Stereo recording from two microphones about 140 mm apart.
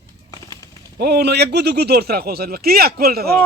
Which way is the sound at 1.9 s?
90° right.